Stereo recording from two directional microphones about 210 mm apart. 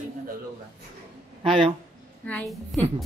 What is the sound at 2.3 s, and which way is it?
Speech, 5° left (ahead or behind).